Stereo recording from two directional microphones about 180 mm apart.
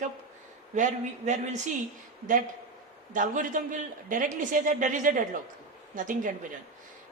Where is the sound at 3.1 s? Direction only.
45° right (ahead or behind).